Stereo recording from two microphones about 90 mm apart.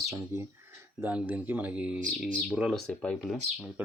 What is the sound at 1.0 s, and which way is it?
Speech, 15° right (ahead or behind).